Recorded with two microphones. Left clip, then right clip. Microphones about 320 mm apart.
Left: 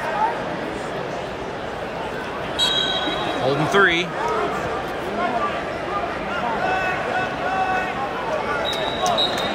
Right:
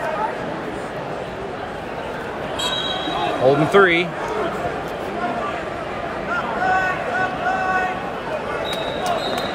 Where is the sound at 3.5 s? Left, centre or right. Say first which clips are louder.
Right 3 dB; centre.